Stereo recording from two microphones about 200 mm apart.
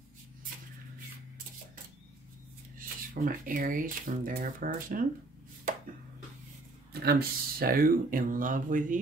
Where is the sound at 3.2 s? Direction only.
45° right (ahead or behind).